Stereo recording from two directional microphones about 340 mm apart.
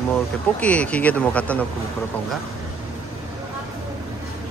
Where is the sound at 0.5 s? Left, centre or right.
Centre.